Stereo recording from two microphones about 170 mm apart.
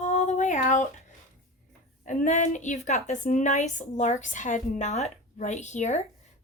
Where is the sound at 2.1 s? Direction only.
50° left (ahead or behind).